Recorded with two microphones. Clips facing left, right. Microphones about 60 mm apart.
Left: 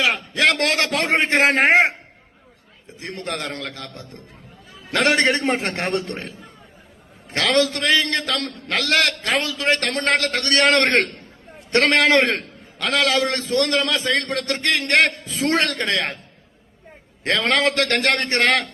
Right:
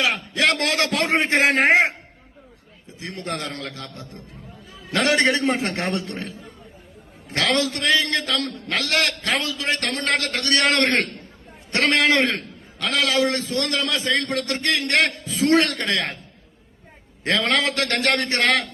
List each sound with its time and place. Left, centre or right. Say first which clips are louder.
0.0 s a sound: left 2 dB; left
3.0 s a man's voice: left 1 dB; left
4.9 s a man's voice: left 1 dB; left
7.3 s a man's voice: left 3 dB; left
10.4 s a man's voice: left 2 dB; left
17.2 s a man's voice: left 2 dB; left